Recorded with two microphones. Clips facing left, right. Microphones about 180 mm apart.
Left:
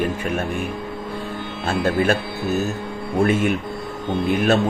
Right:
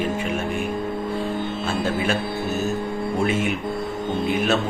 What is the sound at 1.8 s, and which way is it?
Speech, 60° left (ahead or behind).